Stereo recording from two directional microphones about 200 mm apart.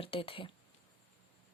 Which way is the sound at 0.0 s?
30° left (ahead or behind).